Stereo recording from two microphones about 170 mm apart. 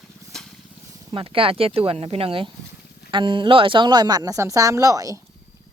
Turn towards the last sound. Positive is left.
turn(degrees=-20)  # may be behind; listen again after turning